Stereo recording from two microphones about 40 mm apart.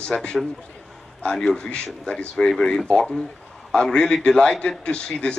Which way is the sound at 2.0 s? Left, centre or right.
Left.